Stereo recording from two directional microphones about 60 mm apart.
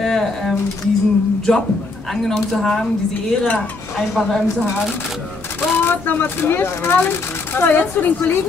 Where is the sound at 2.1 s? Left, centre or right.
Centre.